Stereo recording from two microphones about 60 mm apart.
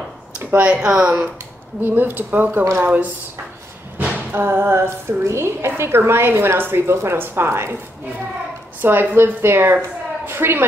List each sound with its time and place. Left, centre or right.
0.7 s speech: centre
1.8 s a woman's voice: right
4.0 s music: right
4.4 s a woman's voice: right
8.8 s a woman's voice: right